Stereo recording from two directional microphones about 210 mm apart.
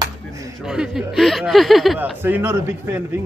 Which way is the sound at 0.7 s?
5° right (ahead or behind).